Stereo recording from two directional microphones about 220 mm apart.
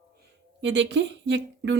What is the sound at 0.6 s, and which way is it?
Speech, 55° right (ahead or behind).